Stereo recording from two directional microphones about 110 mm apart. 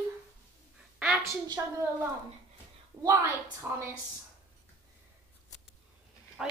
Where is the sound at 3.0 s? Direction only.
30° right (ahead or behind).